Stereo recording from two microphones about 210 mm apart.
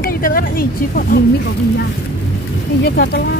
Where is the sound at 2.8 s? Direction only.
50° left (ahead or behind).